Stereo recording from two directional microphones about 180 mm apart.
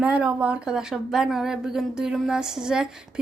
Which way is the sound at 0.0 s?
5° right (ahead or behind).